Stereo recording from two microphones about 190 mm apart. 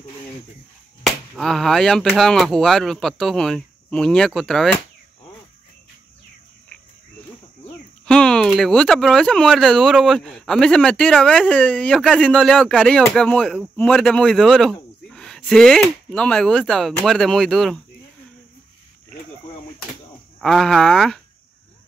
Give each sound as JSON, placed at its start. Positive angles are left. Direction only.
{"t": 1.0, "sound": "speech", "side_deg": 0}
{"t": 8.0, "sound": "speech", "side_deg": 5}
{"t": 20.3, "sound": "speech", "side_deg": 0}